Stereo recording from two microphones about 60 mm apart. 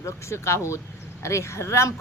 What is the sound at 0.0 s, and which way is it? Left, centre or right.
Speech, left.